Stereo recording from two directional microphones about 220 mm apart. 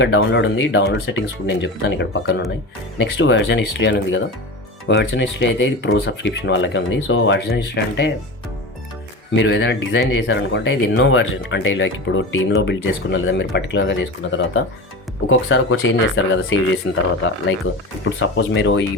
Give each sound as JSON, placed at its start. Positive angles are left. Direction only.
{"t": 0.0, "sound": "speech", "side_deg": 60}
{"t": 9.3, "sound": "speech", "side_deg": 55}